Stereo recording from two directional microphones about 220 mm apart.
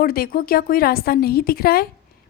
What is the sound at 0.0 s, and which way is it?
A woman's voice, 40° left (ahead or behind).